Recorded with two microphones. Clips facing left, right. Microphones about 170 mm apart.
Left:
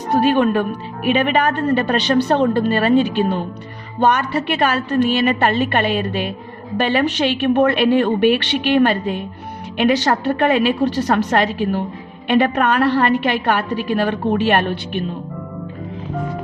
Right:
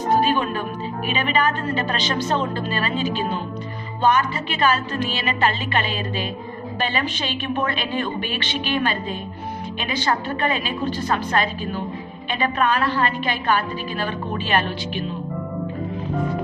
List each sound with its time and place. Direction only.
0.1 s a woman's voice: 65° left (ahead or behind)